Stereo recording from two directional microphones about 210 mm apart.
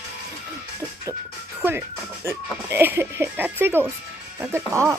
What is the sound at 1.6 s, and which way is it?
Speech, 10° right (ahead or behind).